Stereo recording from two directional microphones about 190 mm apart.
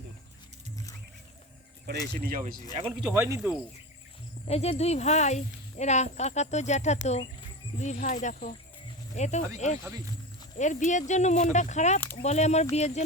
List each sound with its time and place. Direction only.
2.2 s speech: 50° right (ahead or behind)
3.1 s speech: 15° right (ahead or behind)
4.4 s speech: 35° left (ahead or behind)